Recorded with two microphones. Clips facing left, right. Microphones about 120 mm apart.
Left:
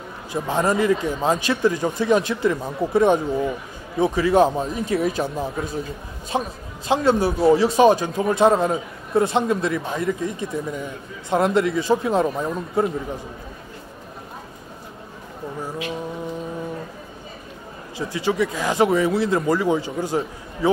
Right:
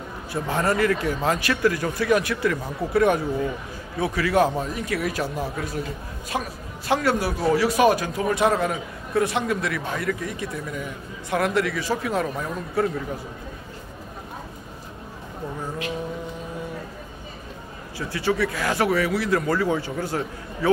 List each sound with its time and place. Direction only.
0.3 s a man's voice: 15° left (ahead or behind)
6.3 s a man's voice: 25° left (ahead or behind)
17.9 s speech: 15° left (ahead or behind)